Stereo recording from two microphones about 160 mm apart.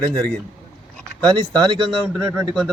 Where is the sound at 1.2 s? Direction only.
25° right (ahead or behind).